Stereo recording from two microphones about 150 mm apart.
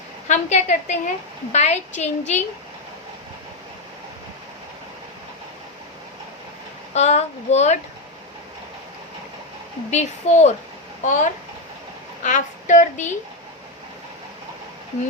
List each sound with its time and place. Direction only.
0.3 s a woman's voice: 50° left (ahead or behind)
6.9 s a woman's voice: 50° left (ahead or behind)
9.9 s a woman's voice: 50° left (ahead or behind)